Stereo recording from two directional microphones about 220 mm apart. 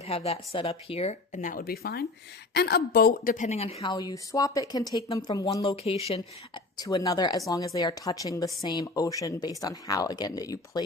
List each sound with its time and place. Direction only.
0.1 s speech: 25° left (ahead or behind)